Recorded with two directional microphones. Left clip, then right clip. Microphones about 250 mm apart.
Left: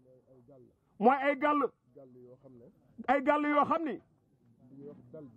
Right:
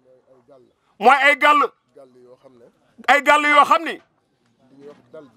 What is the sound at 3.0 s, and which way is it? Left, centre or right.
A man's voice, centre.